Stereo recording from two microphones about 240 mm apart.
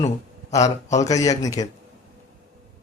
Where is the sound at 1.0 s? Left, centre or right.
Centre.